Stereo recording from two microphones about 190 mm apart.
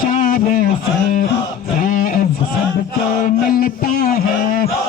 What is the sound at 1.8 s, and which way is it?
Music, 45° left (ahead or behind).